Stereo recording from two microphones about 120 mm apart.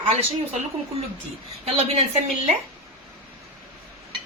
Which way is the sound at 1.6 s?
60° right (ahead or behind).